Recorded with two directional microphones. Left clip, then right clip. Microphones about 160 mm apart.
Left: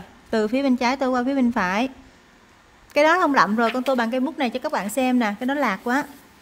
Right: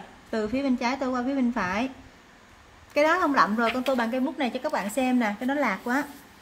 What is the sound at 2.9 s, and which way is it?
A woman's voice, 90° left.